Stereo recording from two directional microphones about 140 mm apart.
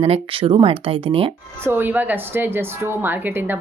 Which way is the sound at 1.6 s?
15° right (ahead or behind).